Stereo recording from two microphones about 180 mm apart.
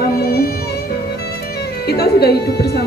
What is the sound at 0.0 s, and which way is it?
Music, 60° left (ahead or behind).